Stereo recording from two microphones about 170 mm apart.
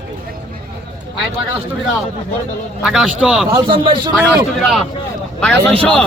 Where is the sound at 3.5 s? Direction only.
25° right (ahead or behind).